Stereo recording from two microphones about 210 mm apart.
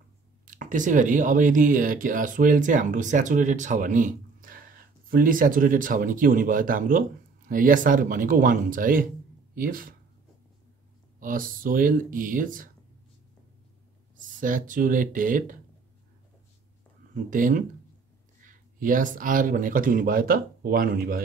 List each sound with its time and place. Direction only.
0.5 s speech: 40° right (ahead or behind)
11.1 s speech: 40° right (ahead or behind)
14.1 s speech: 40° right (ahead or behind)
17.1 s speech: 40° right (ahead or behind)